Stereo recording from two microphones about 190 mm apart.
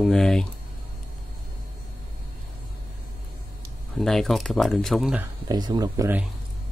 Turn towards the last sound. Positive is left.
turn(degrees=-15)  # may be behind; listen again after turning